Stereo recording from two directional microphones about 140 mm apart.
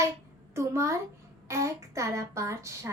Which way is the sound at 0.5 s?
20° right (ahead or behind).